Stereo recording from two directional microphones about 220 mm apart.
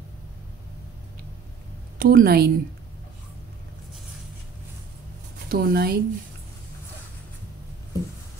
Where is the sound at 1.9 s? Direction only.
40° right (ahead or behind).